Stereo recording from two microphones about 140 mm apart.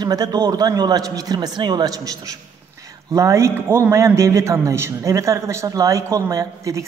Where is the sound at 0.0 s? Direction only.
25° right (ahead or behind).